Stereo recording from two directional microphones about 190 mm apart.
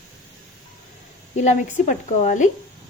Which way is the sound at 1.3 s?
40° left (ahead or behind).